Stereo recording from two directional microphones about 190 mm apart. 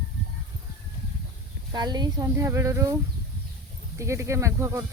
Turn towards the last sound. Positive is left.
turn(degrees=-15)  # may be behind; listen again after turning